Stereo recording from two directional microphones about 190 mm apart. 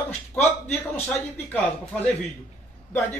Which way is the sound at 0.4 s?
35° left (ahead or behind).